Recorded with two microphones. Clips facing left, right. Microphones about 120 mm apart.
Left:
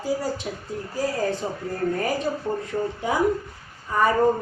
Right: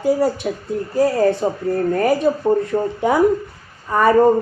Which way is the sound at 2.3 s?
90° right.